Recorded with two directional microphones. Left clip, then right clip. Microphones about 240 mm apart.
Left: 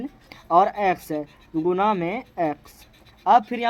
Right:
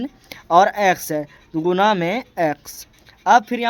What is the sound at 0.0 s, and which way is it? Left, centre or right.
Speech, right.